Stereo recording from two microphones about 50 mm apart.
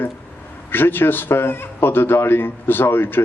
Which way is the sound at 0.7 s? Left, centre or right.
Left.